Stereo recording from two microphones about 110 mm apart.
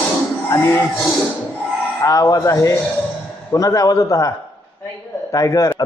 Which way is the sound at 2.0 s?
30° left (ahead or behind).